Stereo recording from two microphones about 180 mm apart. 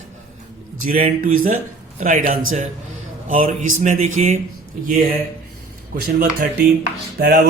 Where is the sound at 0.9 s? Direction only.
50° right (ahead or behind).